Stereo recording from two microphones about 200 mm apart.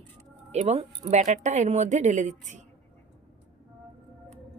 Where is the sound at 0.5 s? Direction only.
30° right (ahead or behind).